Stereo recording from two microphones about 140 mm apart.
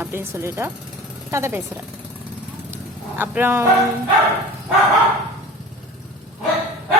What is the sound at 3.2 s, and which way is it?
Speech, 15° right (ahead or behind).